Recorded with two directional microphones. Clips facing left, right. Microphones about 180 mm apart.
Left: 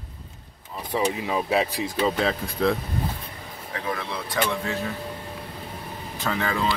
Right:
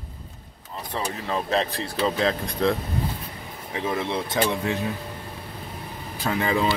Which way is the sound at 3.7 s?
25° right (ahead or behind).